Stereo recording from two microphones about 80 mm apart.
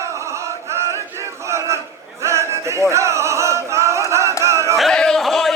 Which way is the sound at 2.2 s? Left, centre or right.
Right.